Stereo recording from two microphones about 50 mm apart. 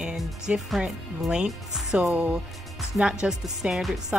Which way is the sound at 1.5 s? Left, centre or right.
Centre.